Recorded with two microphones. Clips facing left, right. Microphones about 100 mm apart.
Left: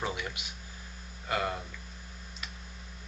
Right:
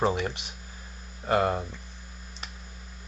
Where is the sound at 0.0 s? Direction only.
35° right (ahead or behind).